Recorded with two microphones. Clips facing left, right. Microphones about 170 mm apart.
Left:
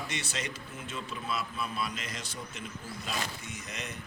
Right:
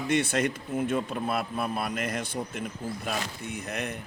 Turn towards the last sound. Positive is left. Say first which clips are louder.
# right 8 dB
turn(degrees=-60)  # may be behind; listen again after turning